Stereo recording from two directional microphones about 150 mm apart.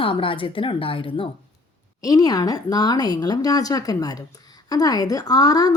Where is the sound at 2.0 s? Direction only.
25° left (ahead or behind).